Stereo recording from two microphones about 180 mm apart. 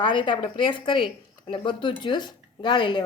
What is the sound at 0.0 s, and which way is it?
A woman's voice, 25° left (ahead or behind).